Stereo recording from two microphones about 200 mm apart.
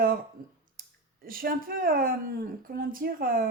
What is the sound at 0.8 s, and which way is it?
Speech, 45° right (ahead or behind).